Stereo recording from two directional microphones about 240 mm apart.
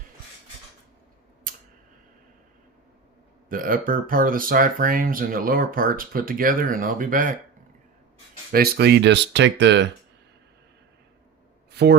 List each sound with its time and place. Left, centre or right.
1.5 s tick: right
3.5 s speech: right
8.5 s speech: right
11.7 s a sound: right